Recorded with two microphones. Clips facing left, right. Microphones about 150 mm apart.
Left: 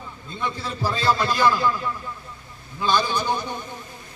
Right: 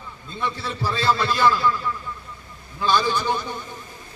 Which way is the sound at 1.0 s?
15° left (ahead or behind).